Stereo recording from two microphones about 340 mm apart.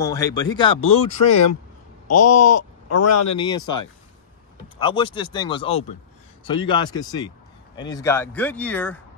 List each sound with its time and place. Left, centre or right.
0.0 s a man's voice: centre
0.8 s speech: left
2.1 s speech: left
2.5 s speech: left
3.3 s a man's voice: centre
4.7 s a man's voice: centre